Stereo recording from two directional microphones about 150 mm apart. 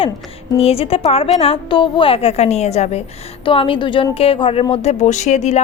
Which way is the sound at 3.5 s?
35° left (ahead or behind).